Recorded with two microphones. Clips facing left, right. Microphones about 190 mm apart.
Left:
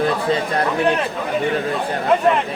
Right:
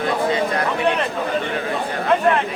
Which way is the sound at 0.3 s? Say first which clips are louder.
Left 1 dB; 30° left (ahead or behind).